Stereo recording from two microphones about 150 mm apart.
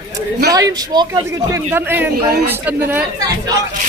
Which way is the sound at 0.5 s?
25° right (ahead or behind).